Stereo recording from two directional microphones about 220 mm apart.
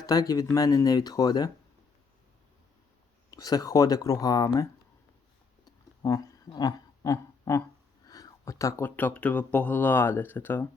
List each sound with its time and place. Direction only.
0.0 s speech: 15° left (ahead or behind)
3.2 s speech: 15° left (ahead or behind)
5.6 s a sound: 15° left (ahead or behind)
8.0 s speech: 15° left (ahead or behind)